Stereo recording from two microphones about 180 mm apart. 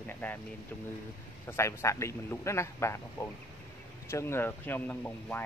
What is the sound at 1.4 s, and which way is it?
Speech, 15° left (ahead or behind).